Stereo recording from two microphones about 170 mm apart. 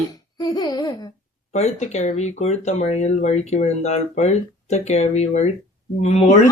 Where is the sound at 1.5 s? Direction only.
40° left (ahead or behind).